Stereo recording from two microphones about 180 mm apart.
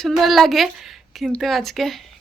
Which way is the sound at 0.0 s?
Centre (ahead or behind).